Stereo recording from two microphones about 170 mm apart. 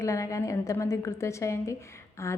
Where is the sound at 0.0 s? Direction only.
20° left (ahead or behind).